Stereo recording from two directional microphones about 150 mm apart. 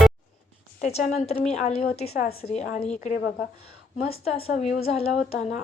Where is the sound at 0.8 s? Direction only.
45° left (ahead or behind).